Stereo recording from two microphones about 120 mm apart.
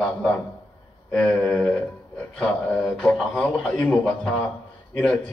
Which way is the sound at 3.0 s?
10° left (ahead or behind).